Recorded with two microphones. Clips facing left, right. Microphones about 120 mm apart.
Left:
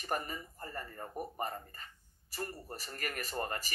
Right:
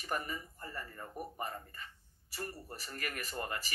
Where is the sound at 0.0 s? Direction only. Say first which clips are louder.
Left 1 dB; 45° left (ahead or behind).